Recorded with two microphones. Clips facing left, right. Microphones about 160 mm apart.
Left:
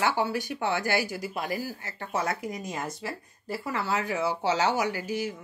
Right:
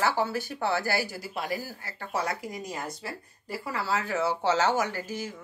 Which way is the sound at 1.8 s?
20° left (ahead or behind).